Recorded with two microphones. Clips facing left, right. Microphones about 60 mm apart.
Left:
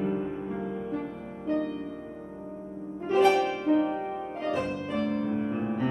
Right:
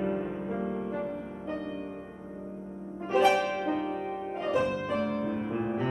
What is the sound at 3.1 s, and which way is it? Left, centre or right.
Music, centre.